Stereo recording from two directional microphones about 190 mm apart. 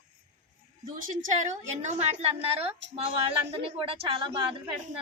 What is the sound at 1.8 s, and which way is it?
Speech, 35° right (ahead or behind).